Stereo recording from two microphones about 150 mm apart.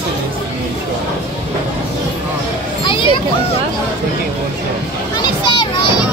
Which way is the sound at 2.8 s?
35° left (ahead or behind).